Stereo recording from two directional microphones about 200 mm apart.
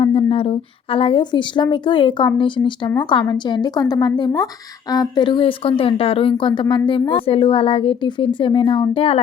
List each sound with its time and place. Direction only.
0.0 s a woman's voice: 25° left (ahead or behind)